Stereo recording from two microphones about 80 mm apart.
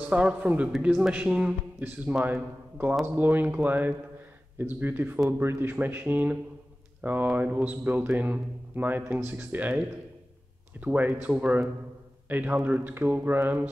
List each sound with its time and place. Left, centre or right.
0.1 s a man's voice: centre
2.3 s a man's voice: right